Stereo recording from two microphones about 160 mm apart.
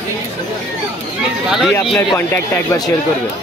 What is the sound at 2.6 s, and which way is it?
Speech, 25° left (ahead or behind).